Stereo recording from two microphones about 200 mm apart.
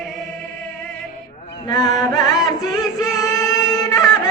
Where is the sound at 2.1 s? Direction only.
20° left (ahead or behind).